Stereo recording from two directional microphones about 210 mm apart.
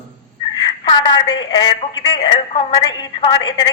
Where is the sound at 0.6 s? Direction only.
20° left (ahead or behind).